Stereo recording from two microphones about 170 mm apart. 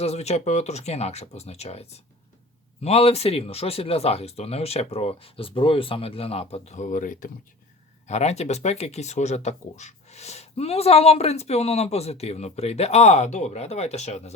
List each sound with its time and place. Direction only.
0.0 s speech: 40° left (ahead or behind)
8.0 s speech: 40° left (ahead or behind)